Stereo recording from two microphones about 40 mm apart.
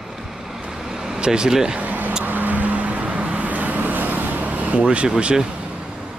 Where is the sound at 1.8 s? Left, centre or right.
Right.